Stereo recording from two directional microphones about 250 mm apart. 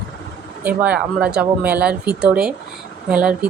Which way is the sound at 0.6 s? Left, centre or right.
Centre.